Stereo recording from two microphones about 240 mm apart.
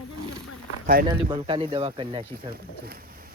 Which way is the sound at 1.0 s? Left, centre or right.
Right.